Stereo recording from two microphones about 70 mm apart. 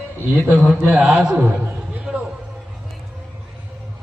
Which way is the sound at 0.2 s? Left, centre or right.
Left.